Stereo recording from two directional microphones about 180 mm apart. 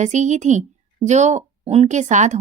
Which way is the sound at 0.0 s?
40° right (ahead or behind).